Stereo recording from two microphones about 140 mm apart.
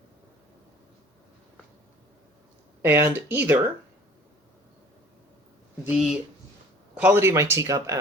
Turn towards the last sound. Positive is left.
turn(degrees=-25)  # may be behind; listen again after turning